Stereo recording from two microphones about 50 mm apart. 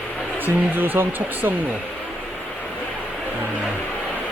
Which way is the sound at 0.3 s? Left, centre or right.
Right.